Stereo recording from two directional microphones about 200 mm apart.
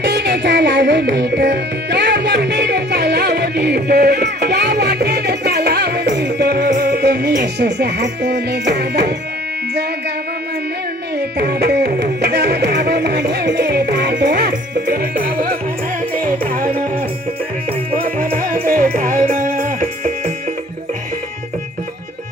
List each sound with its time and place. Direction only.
0.0 s music: 60° right (ahead or behind)
11.2 s music: 55° right (ahead or behind)
18.0 s music: 45° right (ahead or behind)